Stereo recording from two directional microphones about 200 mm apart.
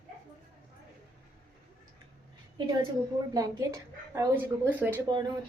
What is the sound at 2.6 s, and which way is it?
Speech, 20° right (ahead or behind).